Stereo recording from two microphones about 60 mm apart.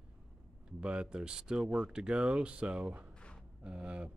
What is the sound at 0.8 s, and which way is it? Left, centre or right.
Speech, centre.